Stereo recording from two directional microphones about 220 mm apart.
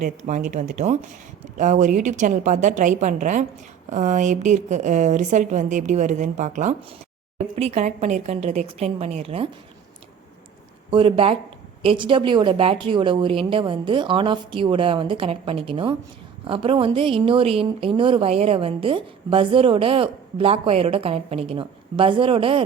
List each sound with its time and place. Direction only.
0.0 s a woman's voice: 35° right (ahead or behind)
10.9 s a woman's voice: 25° right (ahead or behind)